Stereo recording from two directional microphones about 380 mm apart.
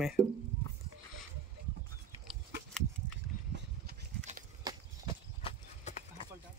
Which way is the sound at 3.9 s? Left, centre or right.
Right.